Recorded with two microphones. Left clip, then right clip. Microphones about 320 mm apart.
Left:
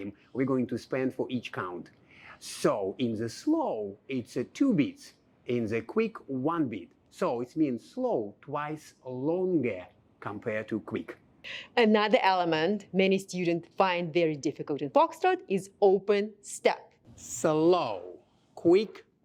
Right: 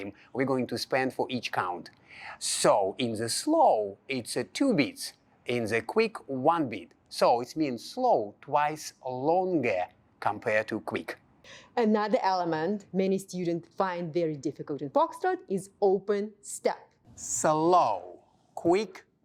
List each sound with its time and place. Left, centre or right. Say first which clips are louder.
0.3 s speech: right 1 dB; right
11.4 s speech: left 3 dB; centre
12.7 s a woman's voice: left 1 dB; centre
13.0 s speech: left 3 dB; centre
13.9 s a woman's voice: left 4 dB; centre
14.5 s speech: left 2 dB; centre
14.9 s a woman's voice: left 2 dB; centre
17.2 s speech: right 1 dB; right